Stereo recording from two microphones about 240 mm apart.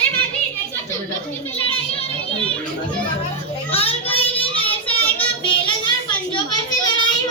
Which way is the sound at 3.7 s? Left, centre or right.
Left.